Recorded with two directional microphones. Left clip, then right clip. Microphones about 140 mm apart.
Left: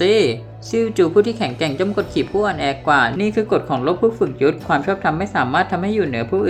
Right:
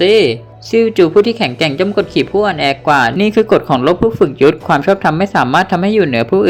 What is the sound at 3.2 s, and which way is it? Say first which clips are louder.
Speech: right 7 dB; 40° right (ahead or behind).